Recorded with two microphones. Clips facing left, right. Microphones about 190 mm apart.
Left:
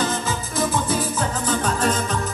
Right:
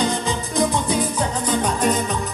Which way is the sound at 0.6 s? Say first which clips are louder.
Right 2 dB; 15° right (ahead or behind).